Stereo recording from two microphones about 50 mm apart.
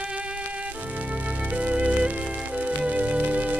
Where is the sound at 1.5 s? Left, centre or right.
Right.